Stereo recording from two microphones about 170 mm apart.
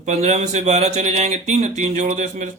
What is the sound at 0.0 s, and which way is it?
Speech, 40° right (ahead or behind).